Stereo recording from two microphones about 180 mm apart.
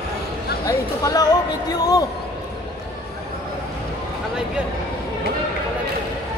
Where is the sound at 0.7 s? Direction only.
20° left (ahead or behind).